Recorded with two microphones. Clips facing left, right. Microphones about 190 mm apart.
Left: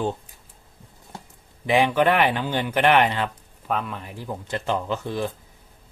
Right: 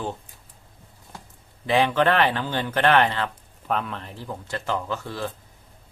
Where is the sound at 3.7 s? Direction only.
Centre (ahead or behind); by 5.3 s 20° left (ahead or behind).